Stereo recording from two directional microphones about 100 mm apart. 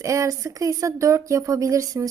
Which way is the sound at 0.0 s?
30° right (ahead or behind).